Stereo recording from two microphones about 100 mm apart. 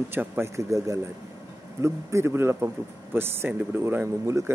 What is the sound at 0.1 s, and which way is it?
A man's voice, 25° right (ahead or behind).